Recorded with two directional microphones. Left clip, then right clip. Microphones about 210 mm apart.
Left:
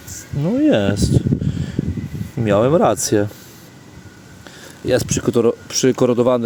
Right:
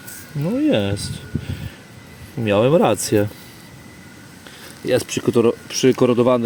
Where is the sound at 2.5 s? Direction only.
10° left (ahead or behind).